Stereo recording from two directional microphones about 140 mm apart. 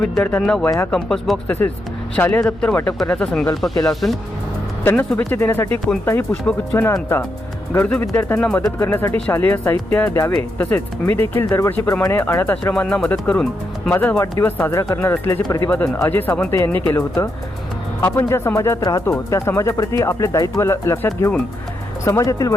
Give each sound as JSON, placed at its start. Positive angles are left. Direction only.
{"t": 0.1, "sound": "speech", "side_deg": 10}
{"t": 15.4, "sound": "speech", "side_deg": 30}
{"t": 15.7, "sound": "speech", "side_deg": 10}